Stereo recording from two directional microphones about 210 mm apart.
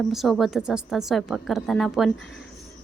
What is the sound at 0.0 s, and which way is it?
A woman's voice, centre (ahead or behind).